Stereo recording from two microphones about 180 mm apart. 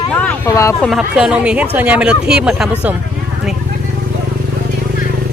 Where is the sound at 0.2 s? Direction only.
15° left (ahead or behind).